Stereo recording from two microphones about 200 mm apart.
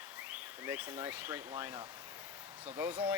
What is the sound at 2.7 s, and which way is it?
Speech, 10° right (ahead or behind).